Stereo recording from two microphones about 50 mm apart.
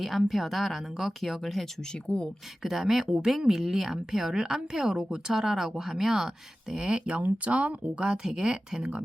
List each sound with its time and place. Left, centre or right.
0.0 s speech: centre
2.6 s a woman's voice: centre